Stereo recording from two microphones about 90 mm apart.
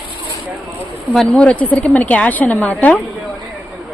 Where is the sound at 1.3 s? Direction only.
15° left (ahead or behind).